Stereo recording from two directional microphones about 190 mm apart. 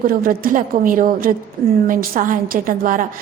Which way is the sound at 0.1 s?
50° right (ahead or behind).